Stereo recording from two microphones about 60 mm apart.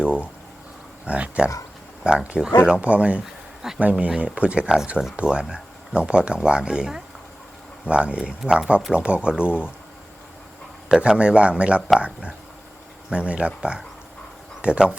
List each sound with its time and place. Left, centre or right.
0.0 s speech: centre
11.0 s speech: centre